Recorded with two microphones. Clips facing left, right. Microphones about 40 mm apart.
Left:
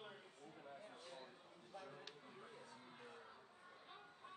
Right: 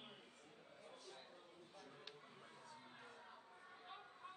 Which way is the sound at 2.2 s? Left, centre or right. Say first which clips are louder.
Left 2 dB; centre.